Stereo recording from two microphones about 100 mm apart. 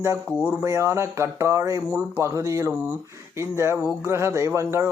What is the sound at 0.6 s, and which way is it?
Speech, 30° right (ahead or behind).